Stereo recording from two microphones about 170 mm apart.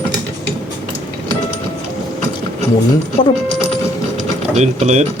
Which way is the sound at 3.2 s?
30° left (ahead or behind).